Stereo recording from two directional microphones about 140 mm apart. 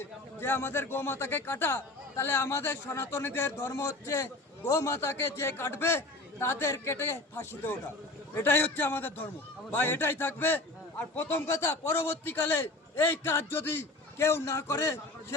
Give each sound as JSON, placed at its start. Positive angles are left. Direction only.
{"t": 0.0, "sound": "speech", "side_deg": 15}